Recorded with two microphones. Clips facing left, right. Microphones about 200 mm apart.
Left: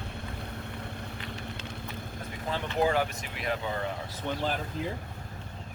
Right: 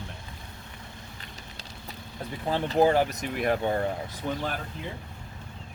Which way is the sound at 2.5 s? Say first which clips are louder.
Right 5 dB; 35° right (ahead or behind).